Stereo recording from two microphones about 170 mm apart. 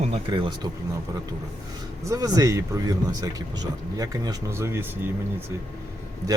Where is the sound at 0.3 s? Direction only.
25° right (ahead or behind).